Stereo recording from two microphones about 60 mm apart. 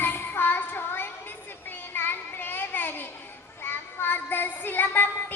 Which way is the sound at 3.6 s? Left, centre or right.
Left.